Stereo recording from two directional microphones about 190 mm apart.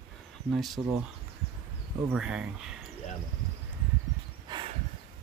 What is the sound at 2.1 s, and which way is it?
Speech, 5° right (ahead or behind).